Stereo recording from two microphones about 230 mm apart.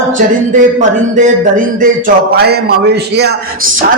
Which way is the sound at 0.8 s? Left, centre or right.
Right.